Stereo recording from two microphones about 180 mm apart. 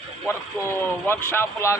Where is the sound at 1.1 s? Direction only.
15° left (ahead or behind).